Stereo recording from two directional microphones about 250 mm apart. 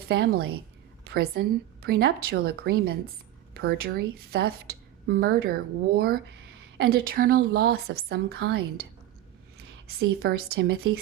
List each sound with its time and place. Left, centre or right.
0.1 s a woman's voice: right
10.2 s a woman's voice: right